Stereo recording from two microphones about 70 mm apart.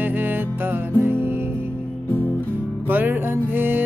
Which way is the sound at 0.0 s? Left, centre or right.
Right.